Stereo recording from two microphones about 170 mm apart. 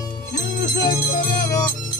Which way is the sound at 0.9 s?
60° left (ahead or behind).